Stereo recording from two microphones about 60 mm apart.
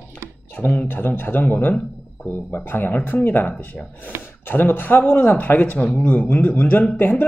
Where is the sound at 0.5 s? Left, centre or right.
Left.